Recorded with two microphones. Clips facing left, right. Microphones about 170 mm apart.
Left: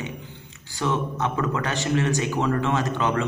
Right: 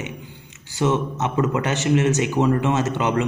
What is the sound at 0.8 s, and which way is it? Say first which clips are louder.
A man's voice: right 4 dB; 20° right (ahead or behind).